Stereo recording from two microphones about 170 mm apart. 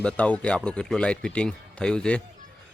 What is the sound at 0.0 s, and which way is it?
Speech, 5° left (ahead or behind).